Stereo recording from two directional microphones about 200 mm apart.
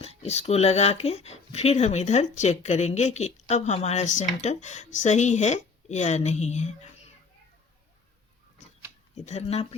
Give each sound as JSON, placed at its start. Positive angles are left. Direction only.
{"t": 0.0, "sound": "speech", "side_deg": 30}
{"t": 9.1, "sound": "speech", "side_deg": 35}